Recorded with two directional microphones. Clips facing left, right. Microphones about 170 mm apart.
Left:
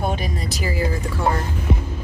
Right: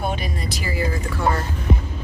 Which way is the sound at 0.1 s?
40° left (ahead or behind).